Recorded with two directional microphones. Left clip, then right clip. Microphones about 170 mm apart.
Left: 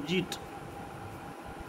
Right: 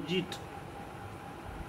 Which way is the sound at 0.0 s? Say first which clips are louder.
Left 2 dB; 70° left (ahead or behind).